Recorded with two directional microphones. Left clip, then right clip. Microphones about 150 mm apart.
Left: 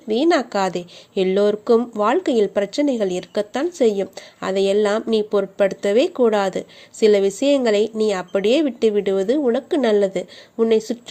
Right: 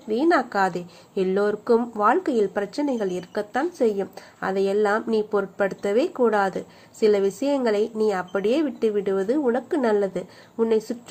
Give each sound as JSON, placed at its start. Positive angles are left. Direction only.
{"t": 0.1, "sound": "a woman's voice", "side_deg": 40}